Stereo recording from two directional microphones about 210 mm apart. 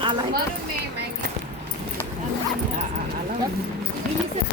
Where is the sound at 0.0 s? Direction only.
25° right (ahead or behind).